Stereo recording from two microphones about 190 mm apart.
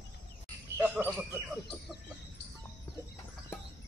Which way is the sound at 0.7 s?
10° right (ahead or behind).